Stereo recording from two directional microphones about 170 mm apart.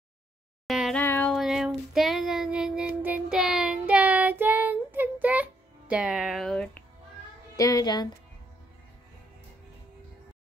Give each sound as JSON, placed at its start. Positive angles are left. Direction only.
{"t": 0.7, "sound": "a sound", "side_deg": 0}
{"t": 1.0, "sound": "music", "side_deg": 10}
{"t": 1.3, "sound": "child singing", "side_deg": 0}
{"t": 7.5, "sound": "speech", "side_deg": 20}